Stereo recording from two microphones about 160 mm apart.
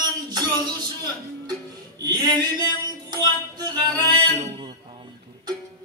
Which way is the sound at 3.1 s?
25° right (ahead or behind).